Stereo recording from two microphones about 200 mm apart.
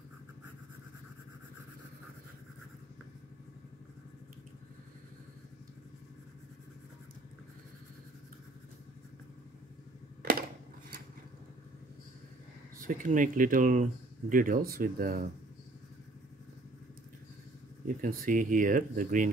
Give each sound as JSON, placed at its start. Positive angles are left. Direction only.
{"t": 12.8, "sound": "speech", "side_deg": -40}
{"t": 17.8, "sound": "speech", "side_deg": -45}